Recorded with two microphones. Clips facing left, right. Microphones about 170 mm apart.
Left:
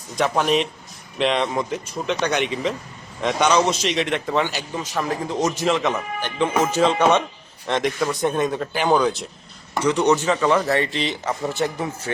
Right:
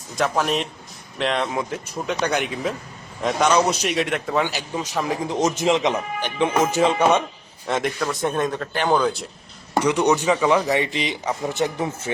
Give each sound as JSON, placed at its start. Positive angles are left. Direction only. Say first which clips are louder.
{"t": 0.2, "sound": "speech", "louder": "left 2 dB", "side_deg": 0}
{"t": 4.4, "sound": "speech", "louder": "right 1 dB", "side_deg": -15}
{"t": 9.8, "sound": "speech", "louder": "left 1 dB", "side_deg": -10}